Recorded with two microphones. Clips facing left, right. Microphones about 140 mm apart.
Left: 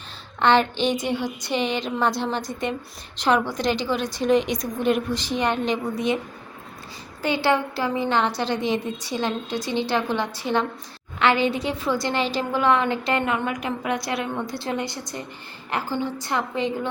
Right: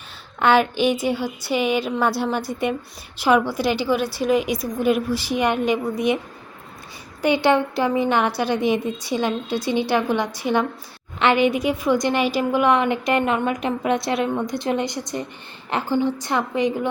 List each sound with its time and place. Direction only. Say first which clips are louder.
0.3 s a woman's voice: right 2 dB; 10° right (ahead or behind)
7.2 s a woman's voice: right 4 dB; 15° right (ahead or behind)